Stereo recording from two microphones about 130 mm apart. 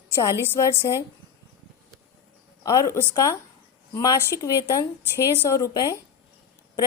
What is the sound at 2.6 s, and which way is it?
A woman's voice, 25° left (ahead or behind).